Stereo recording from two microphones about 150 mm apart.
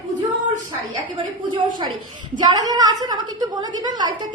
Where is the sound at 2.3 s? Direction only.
30° right (ahead or behind).